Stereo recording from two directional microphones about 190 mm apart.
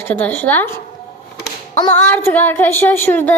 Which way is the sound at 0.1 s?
10° left (ahead or behind).